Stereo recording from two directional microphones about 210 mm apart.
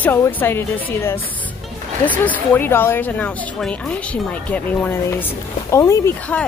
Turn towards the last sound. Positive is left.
turn(degrees=10)  # may be behind; listen again after turning